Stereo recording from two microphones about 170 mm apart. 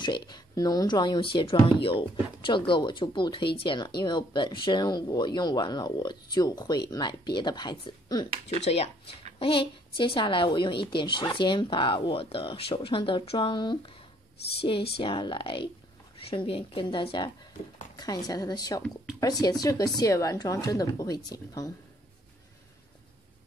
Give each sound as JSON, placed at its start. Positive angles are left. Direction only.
{"t": 0.0, "sound": "speech", "side_deg": 25}
{"t": 8.5, "sound": "speech", "side_deg": 40}
{"t": 15.0, "sound": "speech", "side_deg": 30}